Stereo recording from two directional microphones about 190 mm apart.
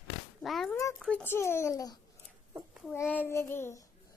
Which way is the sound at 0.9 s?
5° left (ahead or behind).